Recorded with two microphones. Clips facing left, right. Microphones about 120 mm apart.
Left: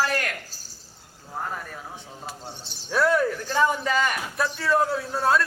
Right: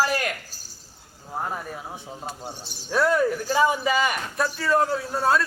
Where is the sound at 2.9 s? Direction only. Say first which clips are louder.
Right 1 dB; centre (ahead or behind).